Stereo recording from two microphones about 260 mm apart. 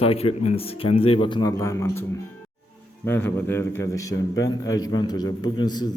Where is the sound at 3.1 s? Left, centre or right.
Centre.